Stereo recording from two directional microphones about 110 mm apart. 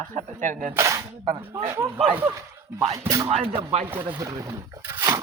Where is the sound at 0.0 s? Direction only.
90° right.